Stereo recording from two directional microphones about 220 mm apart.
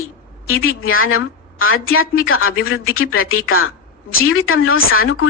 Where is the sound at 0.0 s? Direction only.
70° left (ahead or behind).